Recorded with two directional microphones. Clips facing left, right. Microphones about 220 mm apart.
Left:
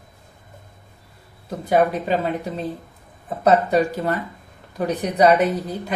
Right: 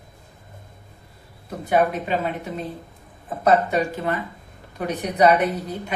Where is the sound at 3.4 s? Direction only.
35° left (ahead or behind).